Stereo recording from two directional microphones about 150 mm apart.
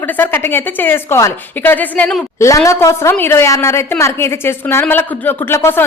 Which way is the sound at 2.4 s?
20° left (ahead or behind).